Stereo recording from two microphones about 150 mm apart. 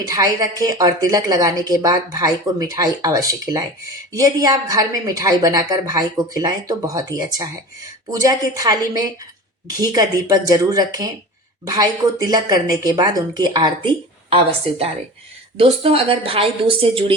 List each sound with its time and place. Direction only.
0.1 s a woman's voice: 25° right (ahead or behind)